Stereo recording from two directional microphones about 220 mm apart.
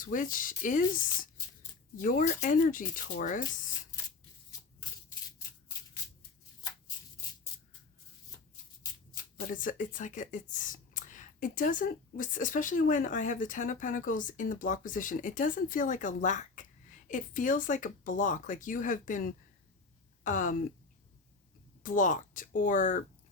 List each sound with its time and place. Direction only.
0.0 s speech: 40° left (ahead or behind)
2.0 s speech: 40° left (ahead or behind)
3.9 s a sound: 15° left (ahead or behind)
9.5 s speech: 35° left (ahead or behind)
21.8 s speech: 35° left (ahead or behind)